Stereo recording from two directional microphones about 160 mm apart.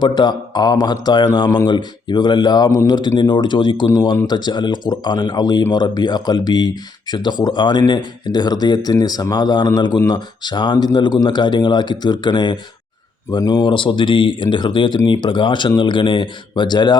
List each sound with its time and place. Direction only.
0.0 s speech: 25° left (ahead or behind)